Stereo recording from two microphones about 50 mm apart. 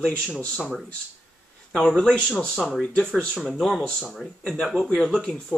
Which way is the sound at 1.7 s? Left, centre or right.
Centre.